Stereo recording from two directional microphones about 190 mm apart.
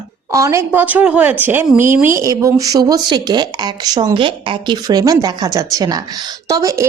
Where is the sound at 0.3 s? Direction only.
15° right (ahead or behind).